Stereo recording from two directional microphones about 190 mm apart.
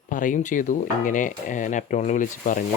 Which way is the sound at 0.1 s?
45° left (ahead or behind).